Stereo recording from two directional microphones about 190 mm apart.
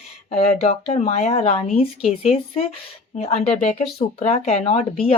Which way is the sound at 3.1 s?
35° left (ahead or behind).